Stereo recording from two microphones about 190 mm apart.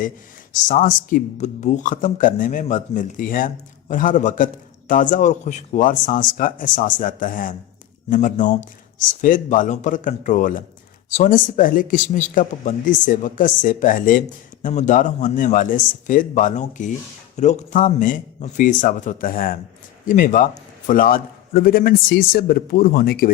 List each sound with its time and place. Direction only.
0.5 s speech: 45° left (ahead or behind)